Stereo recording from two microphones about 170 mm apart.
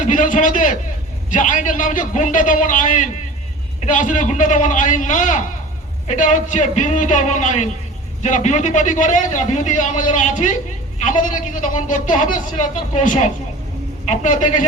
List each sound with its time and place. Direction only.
0.0 s a man's voice: 50° left (ahead or behind)